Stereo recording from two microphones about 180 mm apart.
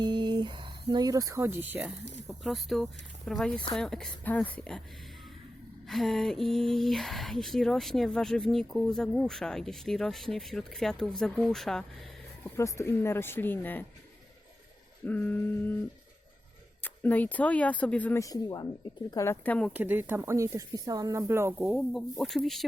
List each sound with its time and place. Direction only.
0.0 s speech: 25° right (ahead or behind)
2.2 s speech: centre (ahead or behind)
5.9 s speech: centre (ahead or behind)
12.5 s speech: 15° left (ahead or behind)
15.0 s speech: 10° left (ahead or behind)
16.8 s speech: 10° left (ahead or behind)
19.7 s speech: 10° right (ahead or behind)